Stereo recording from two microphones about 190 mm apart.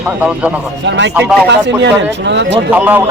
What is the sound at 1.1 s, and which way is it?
Speech, 10° right (ahead or behind).